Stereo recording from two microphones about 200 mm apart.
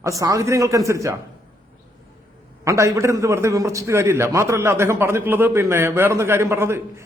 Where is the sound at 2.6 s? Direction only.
15° right (ahead or behind).